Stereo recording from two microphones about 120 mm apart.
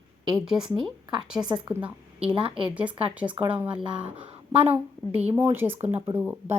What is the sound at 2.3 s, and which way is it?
Speech, 45° right (ahead or behind).